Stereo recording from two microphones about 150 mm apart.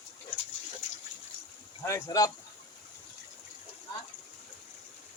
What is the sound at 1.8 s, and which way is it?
Speech, 20° left (ahead or behind).